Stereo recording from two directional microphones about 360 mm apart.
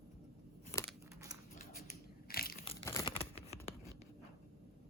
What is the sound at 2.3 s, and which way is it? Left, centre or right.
Tearing, left.